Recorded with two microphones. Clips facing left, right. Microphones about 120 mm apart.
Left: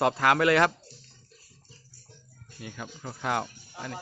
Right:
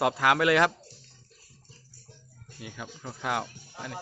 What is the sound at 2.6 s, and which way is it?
Speech, 5° right (ahead or behind).